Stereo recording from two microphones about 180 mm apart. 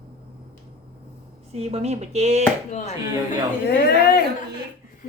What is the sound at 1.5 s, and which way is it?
Speech, 35° right (ahead or behind).